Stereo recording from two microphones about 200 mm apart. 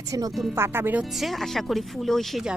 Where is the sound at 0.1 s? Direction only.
20° right (ahead or behind).